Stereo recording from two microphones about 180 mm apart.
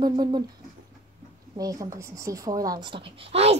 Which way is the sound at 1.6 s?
20° right (ahead or behind).